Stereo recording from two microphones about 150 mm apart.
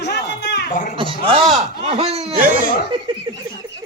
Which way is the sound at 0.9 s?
35° right (ahead or behind).